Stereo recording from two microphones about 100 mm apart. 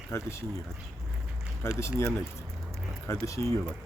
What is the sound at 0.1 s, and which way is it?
Speech, 25° left (ahead or behind).